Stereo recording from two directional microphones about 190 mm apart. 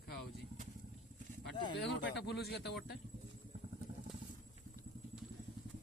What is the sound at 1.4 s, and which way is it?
Speech, 65° left (ahead or behind).